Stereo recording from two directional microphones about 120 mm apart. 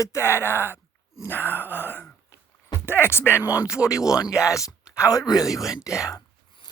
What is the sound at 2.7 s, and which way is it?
Speech, 20° left (ahead or behind).